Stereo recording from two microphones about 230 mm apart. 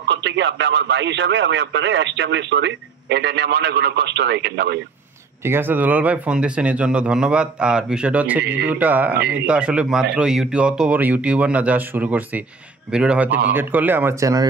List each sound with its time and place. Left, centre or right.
0.1 s speech: right
5.4 s speech: centre